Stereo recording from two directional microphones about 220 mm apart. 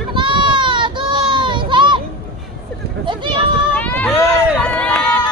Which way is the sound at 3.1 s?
20° right (ahead or behind).